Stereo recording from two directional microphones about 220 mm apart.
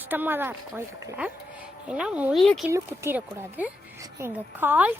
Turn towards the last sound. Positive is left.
turn(degrees=-10)  # may be behind; listen again after turning